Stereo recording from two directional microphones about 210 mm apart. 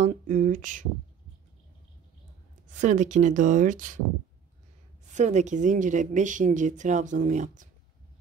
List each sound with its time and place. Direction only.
0.0 s speech: 35° right (ahead or behind)
2.8 s speech: 35° right (ahead or behind)
5.1 s speech: 35° right (ahead or behind)